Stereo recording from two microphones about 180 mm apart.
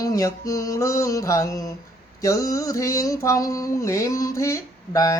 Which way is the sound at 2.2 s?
20° left (ahead or behind).